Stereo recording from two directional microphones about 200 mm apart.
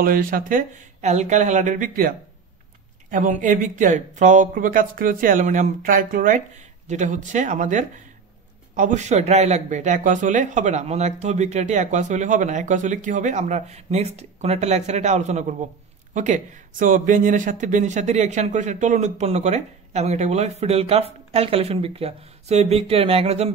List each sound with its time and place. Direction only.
0.0 s speech: 45° right (ahead or behind)